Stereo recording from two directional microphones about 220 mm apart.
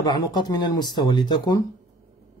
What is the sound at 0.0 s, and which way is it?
Speech, 20° left (ahead or behind).